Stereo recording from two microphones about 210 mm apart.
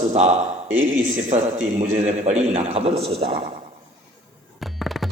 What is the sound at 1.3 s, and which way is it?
A man's voice, 30° right (ahead or behind).